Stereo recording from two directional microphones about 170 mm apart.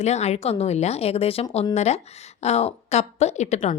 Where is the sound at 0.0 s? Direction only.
40° left (ahead or behind).